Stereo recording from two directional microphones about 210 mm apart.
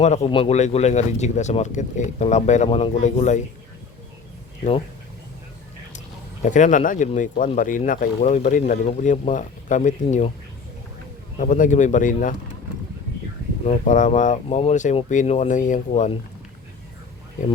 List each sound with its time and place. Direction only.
0.0 s speech: 30° left (ahead or behind)
6.4 s speech: 35° left (ahead or behind)
11.3 s speech: 40° left (ahead or behind)
13.7 s speech: 35° left (ahead or behind)